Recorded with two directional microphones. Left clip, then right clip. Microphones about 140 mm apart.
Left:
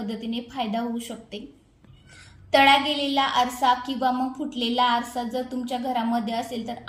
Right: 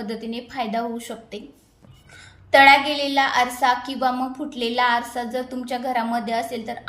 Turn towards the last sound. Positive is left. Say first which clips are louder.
# right 4 dB
turn(degrees=10)  # may be behind; listen again after turning